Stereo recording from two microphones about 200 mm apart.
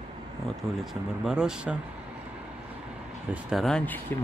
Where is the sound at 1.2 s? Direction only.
5° right (ahead or behind).